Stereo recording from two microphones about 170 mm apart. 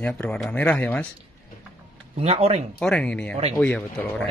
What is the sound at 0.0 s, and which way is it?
A man's voice, 5° left (ahead or behind).